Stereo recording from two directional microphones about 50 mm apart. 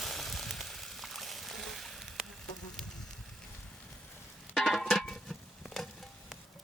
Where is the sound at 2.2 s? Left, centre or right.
Centre.